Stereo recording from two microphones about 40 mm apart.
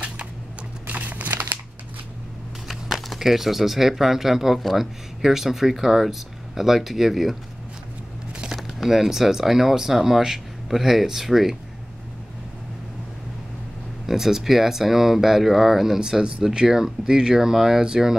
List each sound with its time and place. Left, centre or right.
0.8 s a sound: right
2.7 s speech: centre
8.5 s speech: centre
14.0 s speech: centre
16.0 s speech: centre